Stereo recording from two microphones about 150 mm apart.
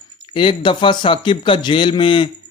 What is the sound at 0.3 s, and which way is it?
A man's voice, 35° left (ahead or behind).